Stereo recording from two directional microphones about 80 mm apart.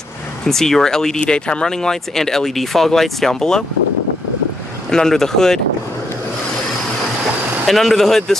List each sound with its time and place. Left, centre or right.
0.5 s speech: centre
4.9 s speech: centre
7.6 s speech: centre